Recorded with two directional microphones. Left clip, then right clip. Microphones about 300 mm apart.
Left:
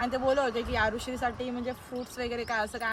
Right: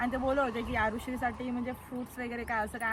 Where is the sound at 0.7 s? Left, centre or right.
Centre.